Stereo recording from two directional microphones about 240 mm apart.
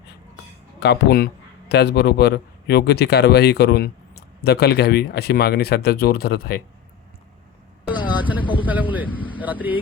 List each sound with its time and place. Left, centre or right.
0.8 s a man's voice: left
7.9 s vehicle: centre
8.6 s a man's voice: centre
9.0 s speech: centre
9.4 s a man's voice: centre